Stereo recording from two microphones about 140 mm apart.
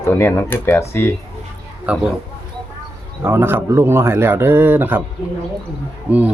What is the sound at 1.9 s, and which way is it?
Speech, 10° right (ahead or behind).